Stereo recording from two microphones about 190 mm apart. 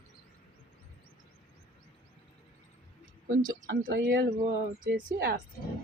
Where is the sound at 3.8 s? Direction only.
55° right (ahead or behind).